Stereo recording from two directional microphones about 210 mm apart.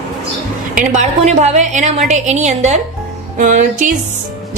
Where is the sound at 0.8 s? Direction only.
35° right (ahead or behind).